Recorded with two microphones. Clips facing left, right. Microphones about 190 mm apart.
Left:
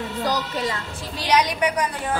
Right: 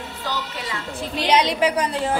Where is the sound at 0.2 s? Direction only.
40° left (ahead or behind).